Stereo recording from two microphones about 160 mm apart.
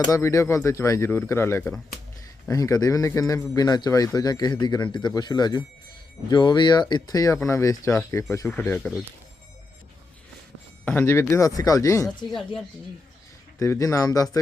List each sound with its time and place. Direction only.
0.0 s a man's voice: 20° left (ahead or behind)
10.8 s speech: 15° left (ahead or behind)
13.6 s a man's voice: 20° left (ahead or behind)